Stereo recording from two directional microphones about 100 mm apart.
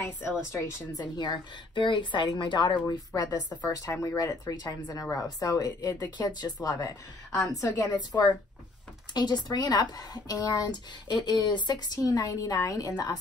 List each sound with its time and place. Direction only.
0.5 s speech: 35° left (ahead or behind)
1.0 s a woman's voice: 50° left (ahead or behind)